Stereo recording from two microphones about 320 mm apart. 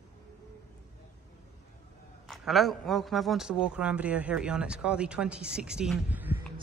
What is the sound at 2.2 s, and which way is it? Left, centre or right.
A man's voice, centre.